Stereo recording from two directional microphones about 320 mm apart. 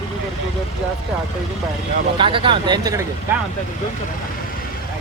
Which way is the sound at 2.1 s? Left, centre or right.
Centre.